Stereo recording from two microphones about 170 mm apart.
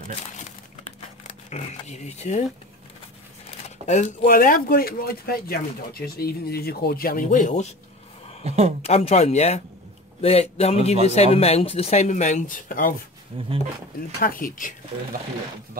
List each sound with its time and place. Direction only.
1.2 s speech: 40° left (ahead or behind)
3.6 s crumpling: 40° left (ahead or behind)
4.2 s speech: 55° left (ahead or behind)
8.5 s speech: 40° right (ahead or behind)
8.8 s speech: 35° left (ahead or behind); by 12.9 s 55° left (ahead or behind)
13.3 s speech: 35° right (ahead or behind)
14.2 s speech: 55° left (ahead or behind)